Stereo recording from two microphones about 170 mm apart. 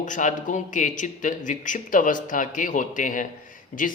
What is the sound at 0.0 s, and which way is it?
Speech, 45° left (ahead or behind).